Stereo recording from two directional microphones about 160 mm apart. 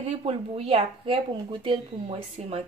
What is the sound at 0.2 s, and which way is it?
Speech, 35° right (ahead or behind).